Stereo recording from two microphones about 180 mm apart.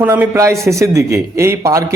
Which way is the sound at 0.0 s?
10° right (ahead or behind).